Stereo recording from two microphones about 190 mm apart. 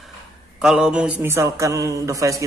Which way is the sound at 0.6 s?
5° right (ahead or behind).